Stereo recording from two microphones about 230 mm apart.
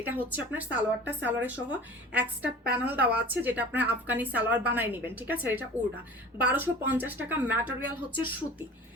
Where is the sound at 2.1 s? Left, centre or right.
Centre.